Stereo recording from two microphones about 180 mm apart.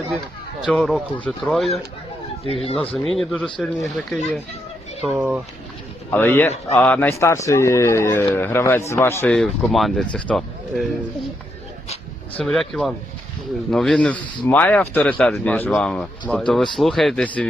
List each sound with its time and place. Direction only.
0.6 s speech: centre (ahead or behind)
2.5 s speech: 30° left (ahead or behind)
2.9 s speech: centre (ahead or behind)
6.1 s speech: 10° left (ahead or behind)
12.4 s speech: centre (ahead or behind)